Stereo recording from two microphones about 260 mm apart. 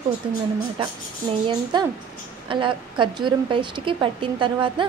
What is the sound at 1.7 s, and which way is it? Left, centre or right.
A woman's voice, centre.